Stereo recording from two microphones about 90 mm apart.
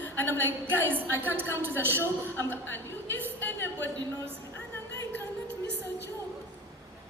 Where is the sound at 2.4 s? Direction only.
25° left (ahead or behind).